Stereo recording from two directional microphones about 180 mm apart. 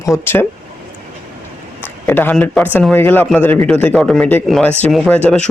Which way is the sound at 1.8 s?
10° left (ahead or behind).